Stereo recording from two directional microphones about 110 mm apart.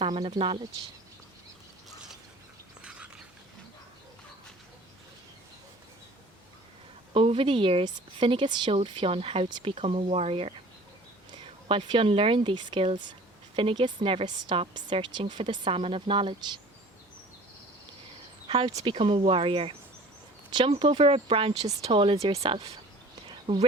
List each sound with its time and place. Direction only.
0.0 s speech: 50° right (ahead or behind)
7.1 s speech: 55° right (ahead or behind)
8.7 s speech: 55° right (ahead or behind)
11.7 s speech: 50° right (ahead or behind)
14.3 s a woman's voice: 40° right (ahead or behind)
18.4 s speech: 55° right (ahead or behind)